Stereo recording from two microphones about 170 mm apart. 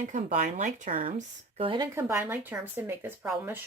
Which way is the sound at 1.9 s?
15° right (ahead or behind).